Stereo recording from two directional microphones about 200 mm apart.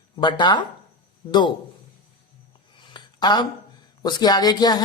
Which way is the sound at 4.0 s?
20° left (ahead or behind).